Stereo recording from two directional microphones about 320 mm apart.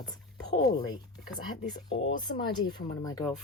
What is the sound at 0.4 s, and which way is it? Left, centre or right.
Speech, centre.